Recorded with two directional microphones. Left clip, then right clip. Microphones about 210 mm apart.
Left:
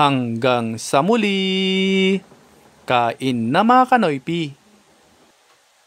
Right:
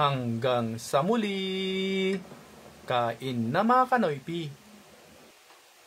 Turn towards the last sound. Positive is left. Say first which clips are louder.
# left 9 dB
turn(degrees=45)  # may be behind; listen again after turning